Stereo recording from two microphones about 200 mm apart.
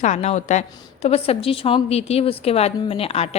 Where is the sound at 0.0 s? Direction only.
35° left (ahead or behind).